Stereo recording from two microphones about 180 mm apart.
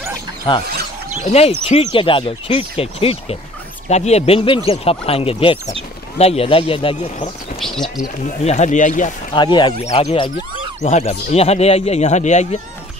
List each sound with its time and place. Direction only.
0.5 s speech: 25° left (ahead or behind)
7.6 s speech: centre (ahead or behind)
8.5 s speech: 40° left (ahead or behind)
9.3 s speech: 25° left (ahead or behind)
10.8 s speech: 40° left (ahead or behind)